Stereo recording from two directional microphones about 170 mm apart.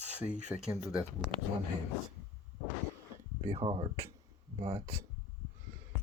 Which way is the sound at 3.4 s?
30° right (ahead or behind).